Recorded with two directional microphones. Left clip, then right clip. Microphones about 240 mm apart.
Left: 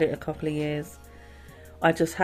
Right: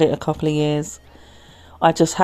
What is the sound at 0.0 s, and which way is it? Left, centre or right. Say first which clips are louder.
Speech: right 8 dB; right.